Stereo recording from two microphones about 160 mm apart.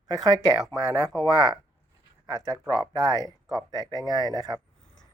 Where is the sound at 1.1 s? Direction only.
Centre (ahead or behind).